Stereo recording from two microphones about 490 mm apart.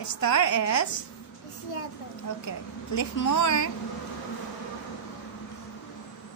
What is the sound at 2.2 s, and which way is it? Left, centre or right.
Speech, left.